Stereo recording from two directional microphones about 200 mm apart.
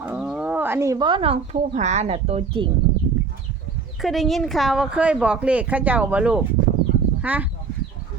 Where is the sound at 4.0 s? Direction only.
Centre (ahead or behind).